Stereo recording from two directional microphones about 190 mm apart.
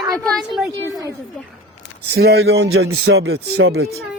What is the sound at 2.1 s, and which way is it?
A man's voice, 60° right (ahead or behind).